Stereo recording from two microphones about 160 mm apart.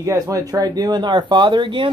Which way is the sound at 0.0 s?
20° right (ahead or behind).